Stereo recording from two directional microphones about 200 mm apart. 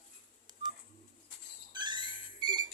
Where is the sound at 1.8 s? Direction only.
20° right (ahead or behind).